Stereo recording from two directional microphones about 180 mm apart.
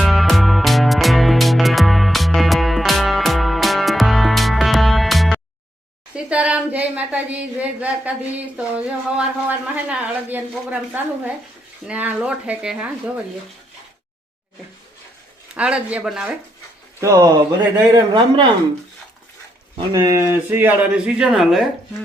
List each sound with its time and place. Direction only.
0.0 s music: centre (ahead or behind)
6.1 s speech: 5° right (ahead or behind)
15.5 s speech: 5° right (ahead or behind)
17.0 s speech: 20° right (ahead or behind)
19.9 s speech: 20° right (ahead or behind); by 21.6 s centre (ahead or behind)